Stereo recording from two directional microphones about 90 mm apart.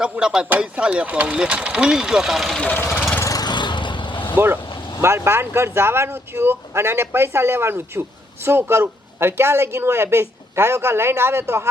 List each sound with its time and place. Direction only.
0.0 s speech: 10° right (ahead or behind)
2.6 s speech: 20° left (ahead or behind)
3.2 s lawn mower: 35° left (ahead or behind)
3.4 s vehicle: 55° left (ahead or behind)
4.9 s speech: 30° right (ahead or behind)